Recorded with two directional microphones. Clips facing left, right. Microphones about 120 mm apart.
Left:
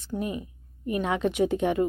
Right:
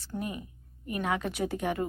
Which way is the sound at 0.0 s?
20° left (ahead or behind).